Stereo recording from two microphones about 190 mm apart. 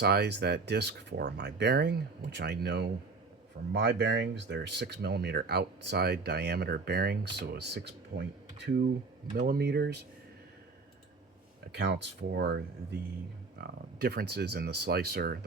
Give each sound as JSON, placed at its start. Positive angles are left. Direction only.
{"t": 0.0, "sound": "speech", "side_deg": -60}
{"t": 9.3, "sound": "speech", "side_deg": -50}
{"t": 11.7, "sound": "speech", "side_deg": -65}